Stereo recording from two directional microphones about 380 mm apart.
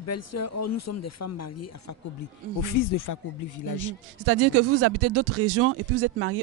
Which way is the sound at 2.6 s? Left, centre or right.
Left.